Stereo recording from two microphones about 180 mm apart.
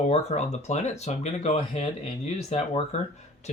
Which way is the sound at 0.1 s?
35° left (ahead or behind).